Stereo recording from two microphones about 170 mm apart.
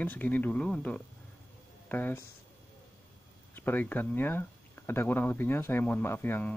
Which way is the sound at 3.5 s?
10° left (ahead or behind).